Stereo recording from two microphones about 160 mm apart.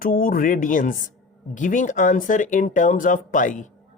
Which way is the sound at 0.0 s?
60° left (ahead or behind).